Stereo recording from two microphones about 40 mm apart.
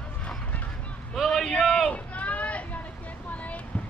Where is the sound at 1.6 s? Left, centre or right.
Centre.